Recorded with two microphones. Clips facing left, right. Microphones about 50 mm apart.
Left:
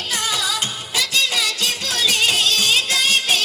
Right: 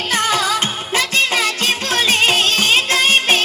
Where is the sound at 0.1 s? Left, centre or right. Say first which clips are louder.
Right 6 dB; right.